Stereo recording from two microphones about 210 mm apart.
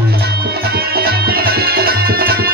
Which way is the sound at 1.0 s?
45° right (ahead or behind).